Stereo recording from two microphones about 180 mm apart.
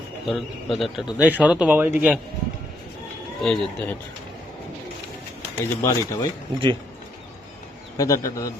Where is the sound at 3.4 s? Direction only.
5° left (ahead or behind).